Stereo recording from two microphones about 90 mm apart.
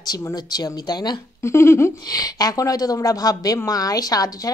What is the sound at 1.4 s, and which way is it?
Speech, 35° left (ahead or behind).